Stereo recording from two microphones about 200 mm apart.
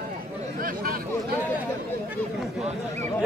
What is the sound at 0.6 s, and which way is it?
Speech, 45° right (ahead or behind).